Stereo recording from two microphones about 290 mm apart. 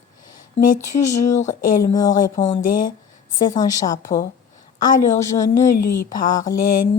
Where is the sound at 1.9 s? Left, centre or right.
Centre.